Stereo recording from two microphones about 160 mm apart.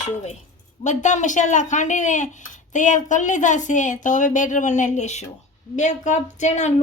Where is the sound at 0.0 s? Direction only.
45° left (ahead or behind).